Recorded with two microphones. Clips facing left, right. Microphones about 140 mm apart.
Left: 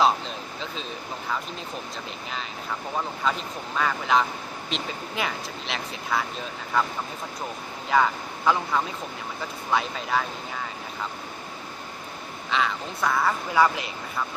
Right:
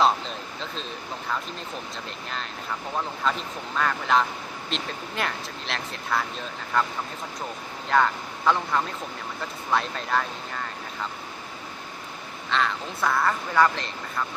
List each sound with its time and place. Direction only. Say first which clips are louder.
0.0 s a sound: even; centre (ahead or behind)
3.2 s speech: even; centre (ahead or behind)
12.5 s speech: even; 5° left (ahead or behind)